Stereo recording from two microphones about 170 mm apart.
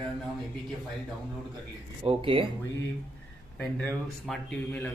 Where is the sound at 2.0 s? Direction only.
35° right (ahead or behind).